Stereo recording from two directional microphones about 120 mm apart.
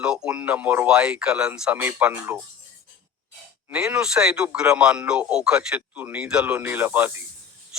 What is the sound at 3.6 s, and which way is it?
A man's voice, 10° right (ahead or behind).